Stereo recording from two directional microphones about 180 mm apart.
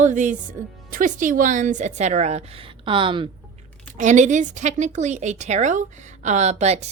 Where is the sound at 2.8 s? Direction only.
30° right (ahead or behind).